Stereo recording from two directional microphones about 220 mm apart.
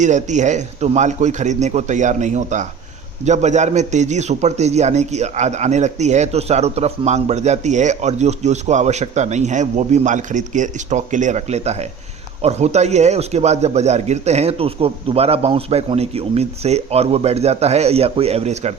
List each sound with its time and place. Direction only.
0.0 s a man's voice: 35° right (ahead or behind)